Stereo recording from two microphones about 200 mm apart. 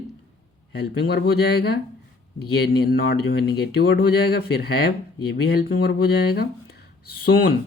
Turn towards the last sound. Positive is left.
turn(degrees=50)  # may be behind; listen again after turning